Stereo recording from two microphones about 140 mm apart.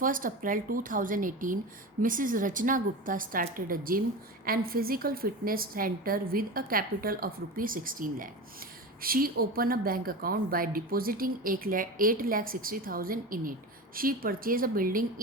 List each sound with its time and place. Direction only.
0.0 s a woman's voice: 80° right
9.0 s speech: 90° right